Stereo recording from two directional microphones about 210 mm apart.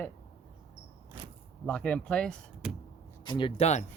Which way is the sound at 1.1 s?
25° right (ahead or behind).